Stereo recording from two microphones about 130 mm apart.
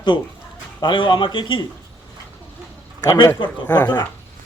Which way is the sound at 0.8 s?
40° left (ahead or behind).